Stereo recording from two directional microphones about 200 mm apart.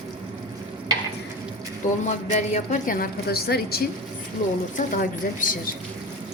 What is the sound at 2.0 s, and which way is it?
A woman's voice, 35° left (ahead or behind).